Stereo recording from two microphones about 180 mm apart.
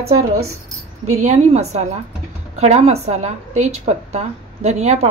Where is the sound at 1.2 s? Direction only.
40° right (ahead or behind).